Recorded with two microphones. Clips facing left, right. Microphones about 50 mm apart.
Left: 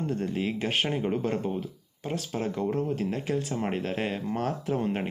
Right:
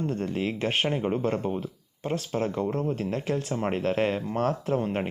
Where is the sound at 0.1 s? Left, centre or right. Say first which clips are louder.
Right 1 dB; right.